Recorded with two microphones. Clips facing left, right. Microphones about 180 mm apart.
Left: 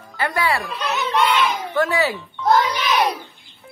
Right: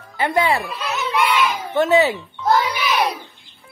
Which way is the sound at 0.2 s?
25° right (ahead or behind).